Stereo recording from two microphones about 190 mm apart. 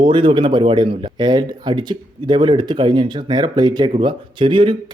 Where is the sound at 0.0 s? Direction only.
25° right (ahead or behind).